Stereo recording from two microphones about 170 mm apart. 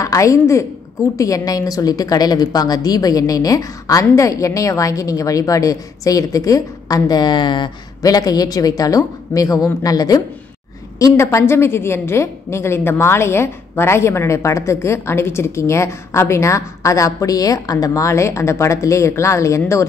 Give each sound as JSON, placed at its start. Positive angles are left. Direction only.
{"t": 0.0, "sound": "a woman's voice", "side_deg": 20}